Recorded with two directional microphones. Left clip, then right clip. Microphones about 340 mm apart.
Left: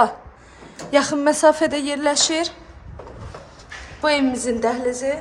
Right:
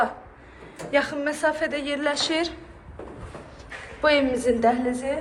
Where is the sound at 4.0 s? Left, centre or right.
Centre.